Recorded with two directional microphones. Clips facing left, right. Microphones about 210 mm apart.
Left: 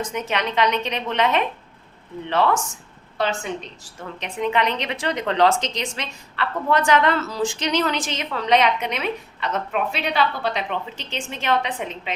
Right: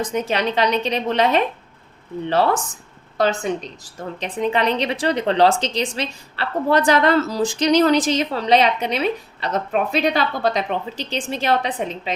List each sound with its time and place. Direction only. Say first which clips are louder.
0.0 s speech: right 4 dB; 35° right (ahead or behind)